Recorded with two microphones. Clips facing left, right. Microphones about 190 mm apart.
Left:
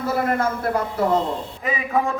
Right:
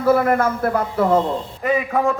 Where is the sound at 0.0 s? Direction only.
55° right (ahead or behind).